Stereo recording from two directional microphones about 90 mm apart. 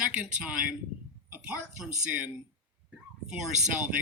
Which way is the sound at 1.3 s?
20° right (ahead or behind).